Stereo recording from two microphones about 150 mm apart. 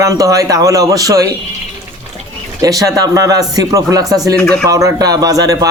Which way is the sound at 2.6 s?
25° right (ahead or behind).